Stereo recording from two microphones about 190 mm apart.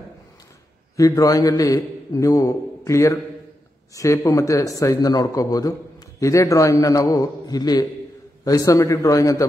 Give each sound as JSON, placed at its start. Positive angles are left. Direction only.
{"t": 0.9, "sound": "speech", "side_deg": 15}